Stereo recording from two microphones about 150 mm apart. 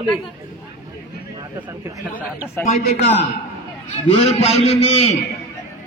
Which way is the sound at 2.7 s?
45° left (ahead or behind).